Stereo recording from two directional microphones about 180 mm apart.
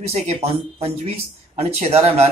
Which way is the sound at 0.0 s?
35° right (ahead or behind).